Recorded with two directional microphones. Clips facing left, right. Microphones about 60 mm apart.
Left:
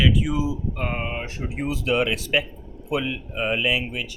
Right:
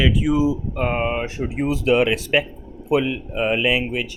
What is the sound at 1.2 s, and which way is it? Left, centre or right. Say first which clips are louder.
Speech: right 5 dB; right.